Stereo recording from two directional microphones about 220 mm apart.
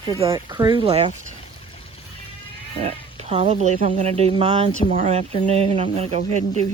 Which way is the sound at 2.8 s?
30° right (ahead or behind).